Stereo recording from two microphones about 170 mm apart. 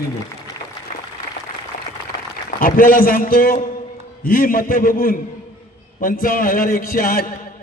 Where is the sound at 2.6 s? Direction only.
55° left (ahead or behind).